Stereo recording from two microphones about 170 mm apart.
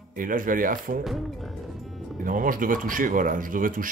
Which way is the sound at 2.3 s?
55° right (ahead or behind).